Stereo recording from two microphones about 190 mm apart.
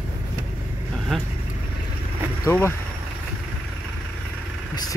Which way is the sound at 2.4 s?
15° left (ahead or behind).